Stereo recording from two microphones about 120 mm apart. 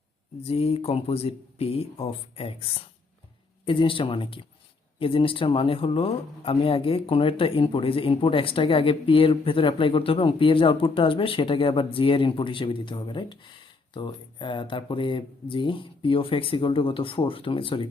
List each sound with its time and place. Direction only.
0.4 s speech: 55° left (ahead or behind)
3.7 s a man's voice: 45° left (ahead or behind)